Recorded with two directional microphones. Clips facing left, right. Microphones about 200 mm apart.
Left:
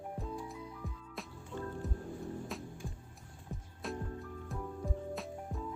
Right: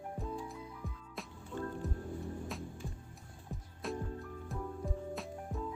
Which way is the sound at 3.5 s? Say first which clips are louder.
Right 1 dB; centre (ahead or behind).